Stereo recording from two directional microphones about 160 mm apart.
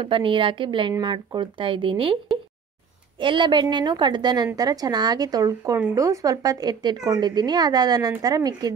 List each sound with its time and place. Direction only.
0.0 s speech: 30° right (ahead or behind)
3.2 s speech: 30° right (ahead or behind)